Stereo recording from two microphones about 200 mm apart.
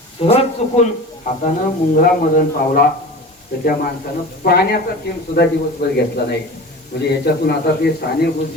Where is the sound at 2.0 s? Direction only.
45° left (ahead or behind).